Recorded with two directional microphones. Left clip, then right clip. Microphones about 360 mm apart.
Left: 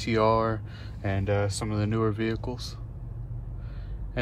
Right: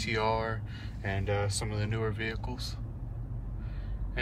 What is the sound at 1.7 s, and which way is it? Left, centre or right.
Speech, centre.